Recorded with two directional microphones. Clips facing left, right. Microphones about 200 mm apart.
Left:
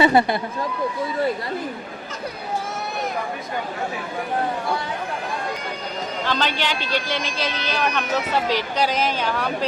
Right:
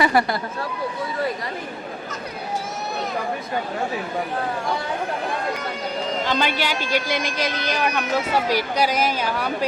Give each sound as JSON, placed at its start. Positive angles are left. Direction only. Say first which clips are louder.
{"t": 0.0, "sound": "speech", "louder": "left 3 dB", "side_deg": 25}
{"t": 6.2, "sound": "speech", "louder": "left 1 dB", "side_deg": -10}